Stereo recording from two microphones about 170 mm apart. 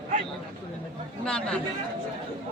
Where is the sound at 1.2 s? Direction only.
5° left (ahead or behind).